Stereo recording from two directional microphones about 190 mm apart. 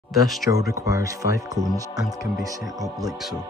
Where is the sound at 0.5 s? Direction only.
15° right (ahead or behind).